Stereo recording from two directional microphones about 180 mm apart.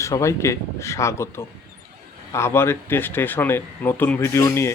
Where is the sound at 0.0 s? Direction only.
15° left (ahead or behind).